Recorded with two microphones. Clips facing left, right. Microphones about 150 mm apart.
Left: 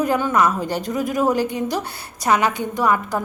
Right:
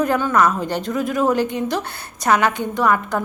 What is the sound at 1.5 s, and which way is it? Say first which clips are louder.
A woman's voice: right 1 dB; 15° left (ahead or behind).